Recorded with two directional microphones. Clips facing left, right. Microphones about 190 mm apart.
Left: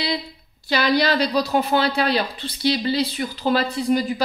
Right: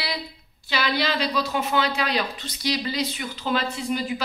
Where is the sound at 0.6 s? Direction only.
40° left (ahead or behind).